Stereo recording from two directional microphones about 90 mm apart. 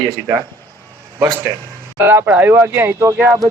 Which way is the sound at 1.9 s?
20° right (ahead or behind).